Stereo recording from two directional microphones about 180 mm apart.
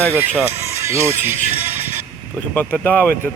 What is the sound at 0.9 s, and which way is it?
Speech, 15° right (ahead or behind).